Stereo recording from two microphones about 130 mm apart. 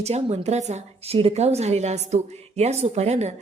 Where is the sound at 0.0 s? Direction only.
55° right (ahead or behind).